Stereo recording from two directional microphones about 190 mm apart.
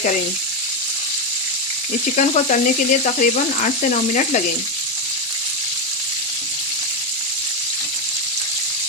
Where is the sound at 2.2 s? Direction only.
40° left (ahead or behind).